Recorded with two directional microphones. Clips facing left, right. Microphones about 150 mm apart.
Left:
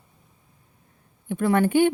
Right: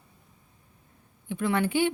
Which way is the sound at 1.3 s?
50° left (ahead or behind).